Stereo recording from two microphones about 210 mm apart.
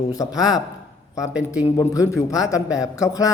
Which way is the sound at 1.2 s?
5° right (ahead or behind).